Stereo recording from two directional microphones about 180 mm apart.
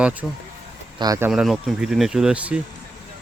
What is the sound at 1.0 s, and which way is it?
Speech, 20° right (ahead or behind).